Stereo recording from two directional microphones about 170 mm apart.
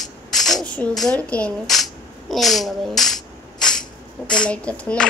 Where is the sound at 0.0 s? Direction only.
Centre (ahead or behind).